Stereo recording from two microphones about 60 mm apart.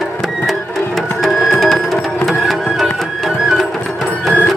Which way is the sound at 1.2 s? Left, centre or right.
Centre.